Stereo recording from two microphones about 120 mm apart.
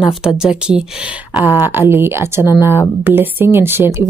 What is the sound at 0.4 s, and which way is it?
Speech, 5° right (ahead or behind).